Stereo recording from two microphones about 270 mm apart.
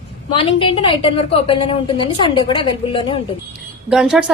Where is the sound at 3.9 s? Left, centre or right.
Centre.